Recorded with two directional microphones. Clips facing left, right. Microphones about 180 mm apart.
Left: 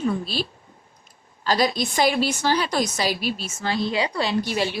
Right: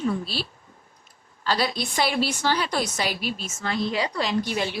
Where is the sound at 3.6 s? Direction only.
25° left (ahead or behind).